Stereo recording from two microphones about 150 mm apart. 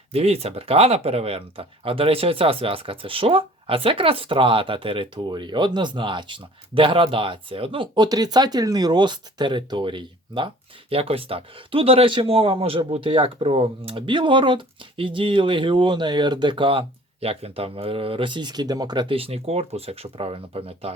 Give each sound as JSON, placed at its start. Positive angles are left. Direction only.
{"t": 0.1, "sound": "speech", "side_deg": -40}